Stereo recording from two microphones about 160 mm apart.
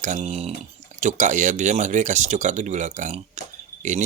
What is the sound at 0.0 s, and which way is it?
Speech, 45° right (ahead or behind).